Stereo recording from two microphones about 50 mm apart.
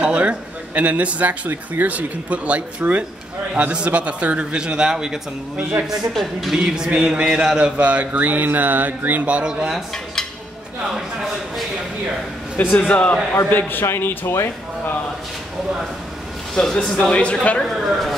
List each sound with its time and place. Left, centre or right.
0.0 s a man's voice: right; by 6.6 s centre
6.6 s a man's voice: centre; by 9.2 s right
9.2 s a man's voice: right
9.5 s a man's voice: centre
11.0 s speech: centre
12.7 s speech: left
13.5 s a man's voice: left
16.5 s speech: centre
17.1 s speech: left
17.7 s a woman's voice: centre